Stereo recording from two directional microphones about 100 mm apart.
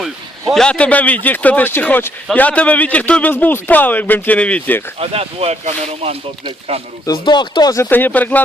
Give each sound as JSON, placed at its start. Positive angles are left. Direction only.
{"t": 0.5, "sound": "a man's voice", "side_deg": 10}
{"t": 4.9, "sound": "speech", "side_deg": -75}
{"t": 7.3, "sound": "speech", "side_deg": 50}
{"t": 7.8, "sound": "a man's voice", "side_deg": 20}